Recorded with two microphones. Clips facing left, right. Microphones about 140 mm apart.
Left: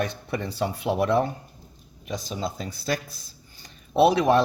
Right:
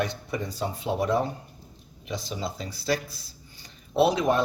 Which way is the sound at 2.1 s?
50° left (ahead or behind).